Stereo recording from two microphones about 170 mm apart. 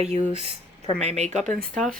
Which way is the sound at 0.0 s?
40° right (ahead or behind).